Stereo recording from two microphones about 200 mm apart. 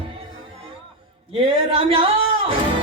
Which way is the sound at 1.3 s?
30° right (ahead or behind).